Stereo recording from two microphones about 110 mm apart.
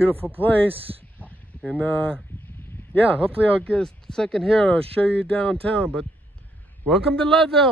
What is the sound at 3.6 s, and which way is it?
A man's voice, 5° left (ahead or behind).